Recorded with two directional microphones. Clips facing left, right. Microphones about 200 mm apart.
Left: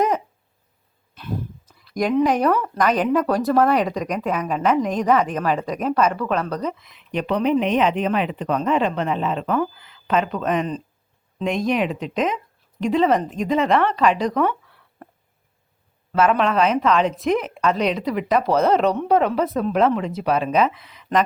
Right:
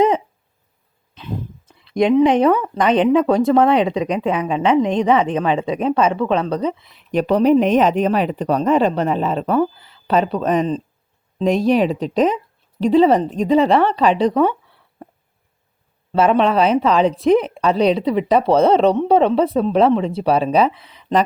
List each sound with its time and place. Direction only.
1.6 s a sound: 25° right (ahead or behind)
2.2 s speech: 25° right (ahead or behind)
16.1 s speech: 30° right (ahead or behind)